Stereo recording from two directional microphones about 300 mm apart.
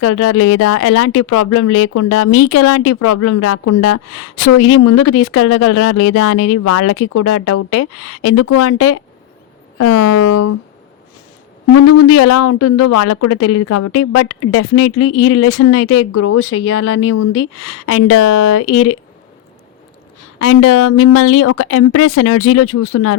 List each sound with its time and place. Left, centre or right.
0.0 s speech: left
10.2 s speech: left
11.8 s speech: left
20.4 s speech: left